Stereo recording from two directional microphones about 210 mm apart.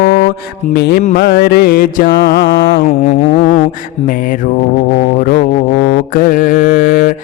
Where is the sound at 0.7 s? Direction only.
50° left (ahead or behind).